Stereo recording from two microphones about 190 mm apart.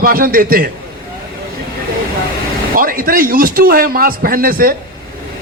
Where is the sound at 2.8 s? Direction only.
50° right (ahead or behind).